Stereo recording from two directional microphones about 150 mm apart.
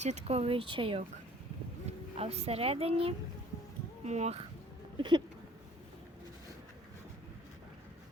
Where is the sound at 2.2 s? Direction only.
45° right (ahead or behind).